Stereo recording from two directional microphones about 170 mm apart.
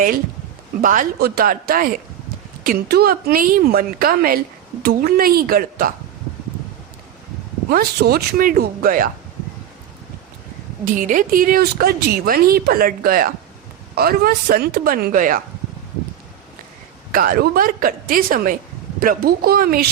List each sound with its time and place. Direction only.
0.8 s speech: 50° right (ahead or behind)
7.7 s speech: 65° right (ahead or behind)
10.9 s speech: 50° right (ahead or behind)
17.1 s speech: 55° right (ahead or behind)